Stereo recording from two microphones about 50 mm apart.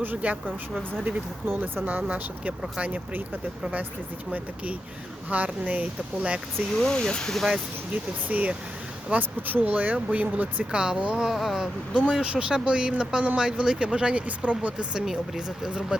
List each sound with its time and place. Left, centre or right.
0.2 s speech: right
1.8 s speech: right
4.3 s speech: right
6.7 s speech: centre
7.3 s speech: centre
8.3 s speech: right
10.7 s speech: centre
11.3 s speech: centre; by 14.8 s right
14.9 s speech: centre